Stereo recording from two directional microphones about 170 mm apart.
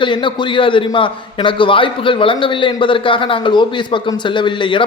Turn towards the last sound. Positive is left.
turn(degrees=30)  # may be behind; listen again after turning